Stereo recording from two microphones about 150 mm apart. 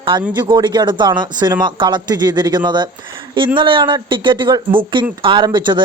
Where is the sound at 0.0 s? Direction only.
35° right (ahead or behind).